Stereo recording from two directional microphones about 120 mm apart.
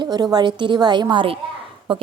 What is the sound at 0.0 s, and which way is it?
A woman's voice, 35° right (ahead or behind).